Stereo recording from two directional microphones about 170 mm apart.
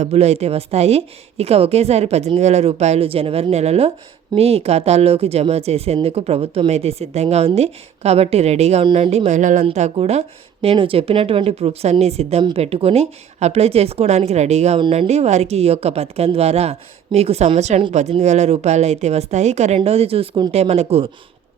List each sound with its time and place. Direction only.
0.0 s speech: 40° right (ahead or behind)